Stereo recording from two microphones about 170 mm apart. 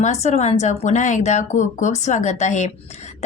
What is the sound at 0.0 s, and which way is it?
A woman's voice, 40° left (ahead or behind).